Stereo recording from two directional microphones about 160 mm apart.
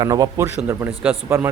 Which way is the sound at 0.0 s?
25° right (ahead or behind).